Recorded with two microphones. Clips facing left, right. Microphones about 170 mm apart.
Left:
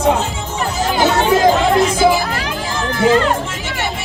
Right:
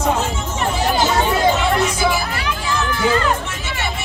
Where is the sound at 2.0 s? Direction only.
45° left (ahead or behind).